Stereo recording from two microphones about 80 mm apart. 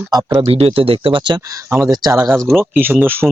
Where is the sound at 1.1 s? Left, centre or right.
Right.